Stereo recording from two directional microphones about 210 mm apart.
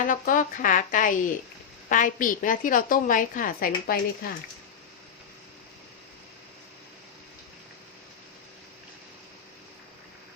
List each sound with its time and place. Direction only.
0.0 s a woman's voice: 40° left (ahead or behind)